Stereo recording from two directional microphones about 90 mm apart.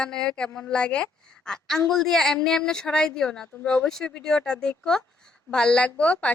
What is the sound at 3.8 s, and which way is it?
Speech, 5° left (ahead or behind).